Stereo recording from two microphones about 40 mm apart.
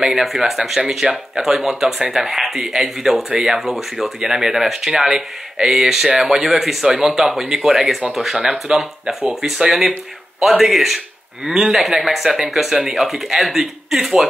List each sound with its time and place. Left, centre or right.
0.0 s speech: centre
8.6 s speech: centre